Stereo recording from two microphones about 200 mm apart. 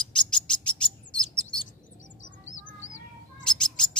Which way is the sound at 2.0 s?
40° left (ahead or behind).